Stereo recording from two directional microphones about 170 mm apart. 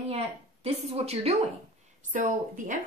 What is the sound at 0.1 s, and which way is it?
Speech, 35° right (ahead or behind).